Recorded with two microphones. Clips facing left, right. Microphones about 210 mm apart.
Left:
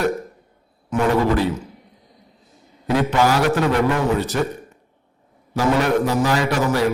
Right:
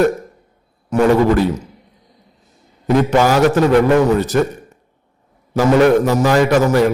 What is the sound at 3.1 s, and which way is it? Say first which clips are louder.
A man's voice: right 4 dB; 45° right (ahead or behind).